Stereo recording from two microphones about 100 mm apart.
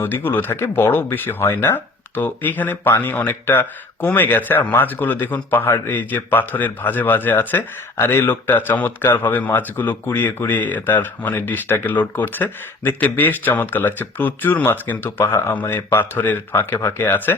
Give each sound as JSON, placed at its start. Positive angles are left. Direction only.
{"t": 0.0, "sound": "speech", "side_deg": 20}